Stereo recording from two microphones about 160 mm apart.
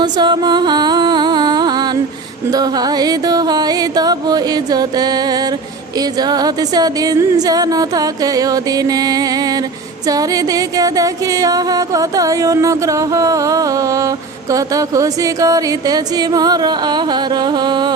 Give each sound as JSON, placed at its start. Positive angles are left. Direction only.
{"t": 0.0, "sound": "music", "side_deg": -30}